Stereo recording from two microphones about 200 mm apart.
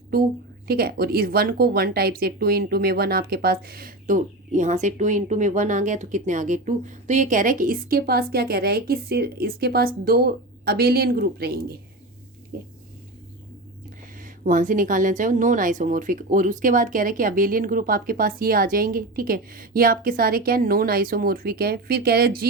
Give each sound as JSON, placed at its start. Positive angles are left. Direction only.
{"t": 0.7, "sound": "speech", "side_deg": -50}
{"t": 14.2, "sound": "speech", "side_deg": -40}